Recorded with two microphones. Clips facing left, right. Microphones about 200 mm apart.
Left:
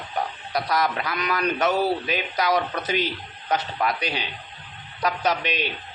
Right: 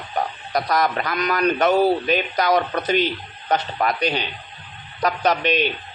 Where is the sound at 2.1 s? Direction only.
5° left (ahead or behind).